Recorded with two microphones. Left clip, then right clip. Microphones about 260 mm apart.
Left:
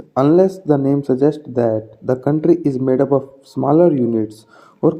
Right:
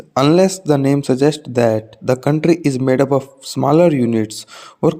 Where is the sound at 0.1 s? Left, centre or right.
Right.